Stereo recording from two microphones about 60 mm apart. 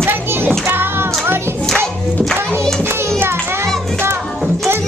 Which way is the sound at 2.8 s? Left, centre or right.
Right.